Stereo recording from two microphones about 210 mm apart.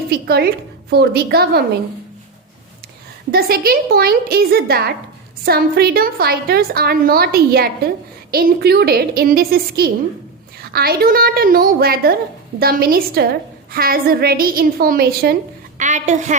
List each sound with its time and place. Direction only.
0.1 s a woman's voice: 50° right (ahead or behind)
3.3 s a woman's voice: 45° right (ahead or behind)
15.8 s a woman's voice: 35° right (ahead or behind)